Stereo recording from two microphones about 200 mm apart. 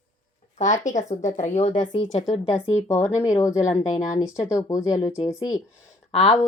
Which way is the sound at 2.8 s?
15° left (ahead or behind).